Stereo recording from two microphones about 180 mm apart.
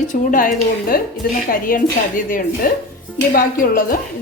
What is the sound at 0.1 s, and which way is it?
A woman's voice, 50° left (ahead or behind).